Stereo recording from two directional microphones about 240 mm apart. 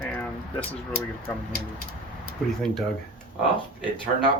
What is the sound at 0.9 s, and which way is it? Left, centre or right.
Speech, right.